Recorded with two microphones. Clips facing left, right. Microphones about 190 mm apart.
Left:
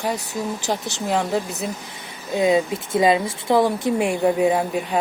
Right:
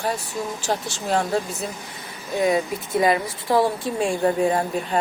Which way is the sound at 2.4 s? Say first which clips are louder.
Left 3 dB; 20° left (ahead or behind).